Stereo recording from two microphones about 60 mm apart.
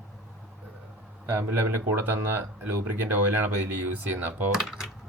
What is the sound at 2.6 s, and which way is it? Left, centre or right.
Speech, right.